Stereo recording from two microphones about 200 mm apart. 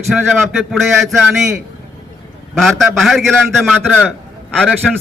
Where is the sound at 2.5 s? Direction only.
Centre (ahead or behind).